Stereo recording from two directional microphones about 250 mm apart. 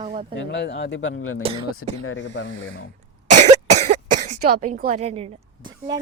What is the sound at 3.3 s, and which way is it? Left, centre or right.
Cough, right.